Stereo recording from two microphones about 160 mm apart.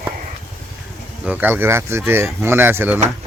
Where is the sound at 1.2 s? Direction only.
10° right (ahead or behind).